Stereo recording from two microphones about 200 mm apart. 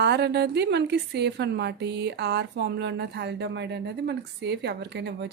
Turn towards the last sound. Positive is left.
turn(degrees=-60)  # may be behind; listen again after turning